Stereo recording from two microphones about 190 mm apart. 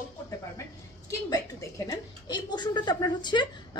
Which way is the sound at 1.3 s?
15° left (ahead or behind).